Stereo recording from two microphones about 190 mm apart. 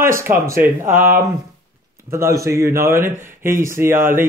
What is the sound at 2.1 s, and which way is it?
Speech, 15° right (ahead or behind).